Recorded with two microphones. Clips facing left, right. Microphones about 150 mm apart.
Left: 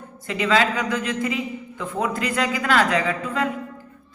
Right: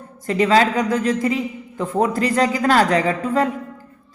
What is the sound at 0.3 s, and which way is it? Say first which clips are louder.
Speech: right 5 dB; 40° right (ahead or behind).